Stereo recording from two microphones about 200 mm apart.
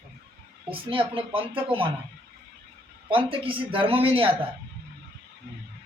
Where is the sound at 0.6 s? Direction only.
25° right (ahead or behind).